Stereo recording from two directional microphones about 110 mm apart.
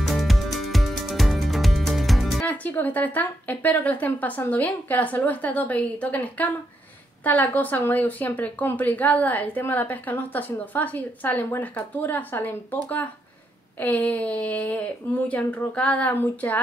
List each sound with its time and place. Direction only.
0.0 s music: centre (ahead or behind)
2.4 s speech: 15° left (ahead or behind)
13.7 s speech: 15° left (ahead or behind)